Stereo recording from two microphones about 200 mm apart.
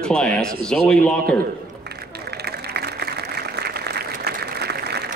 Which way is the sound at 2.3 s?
55° right (ahead or behind).